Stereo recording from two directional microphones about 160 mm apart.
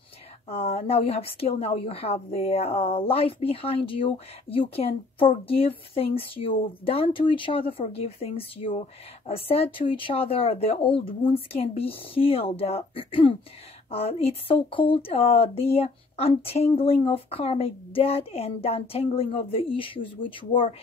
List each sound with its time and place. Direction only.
0.5 s a woman's voice: 40° left (ahead or behind)